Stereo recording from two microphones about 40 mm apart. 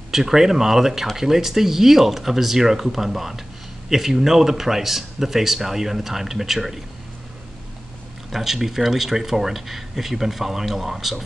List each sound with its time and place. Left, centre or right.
0.1 s speech: centre
8.3 s speech: centre